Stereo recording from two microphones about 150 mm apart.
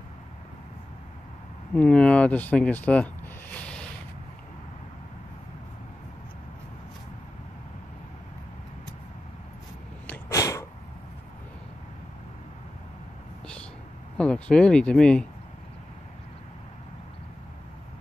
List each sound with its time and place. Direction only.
1.8 s speech: 5° left (ahead or behind)
10.3 s sneeze: 20° left (ahead or behind)
14.1 s speech: 5° left (ahead or behind)